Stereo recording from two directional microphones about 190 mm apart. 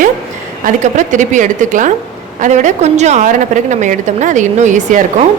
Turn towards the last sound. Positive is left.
turn(degrees=-40)  # may be behind; listen again after turning